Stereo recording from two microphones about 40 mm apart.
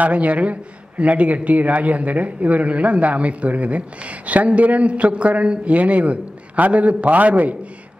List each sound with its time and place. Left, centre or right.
0.0 s a man's voice: right